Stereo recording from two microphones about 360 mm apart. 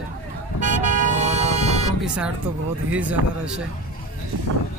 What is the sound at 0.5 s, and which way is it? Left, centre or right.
Vehicle, right.